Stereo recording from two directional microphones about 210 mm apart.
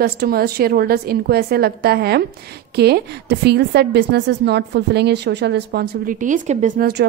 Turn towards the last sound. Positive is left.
turn(degrees=-50)  # may be behind; listen again after turning